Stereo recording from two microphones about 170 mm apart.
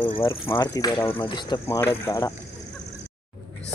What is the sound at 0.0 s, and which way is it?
Speech, 30° left (ahead or behind).